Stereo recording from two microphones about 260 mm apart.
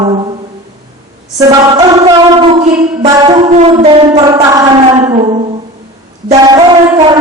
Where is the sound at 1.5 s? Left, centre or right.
Centre.